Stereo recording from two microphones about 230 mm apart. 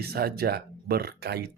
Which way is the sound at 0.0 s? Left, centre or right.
Right.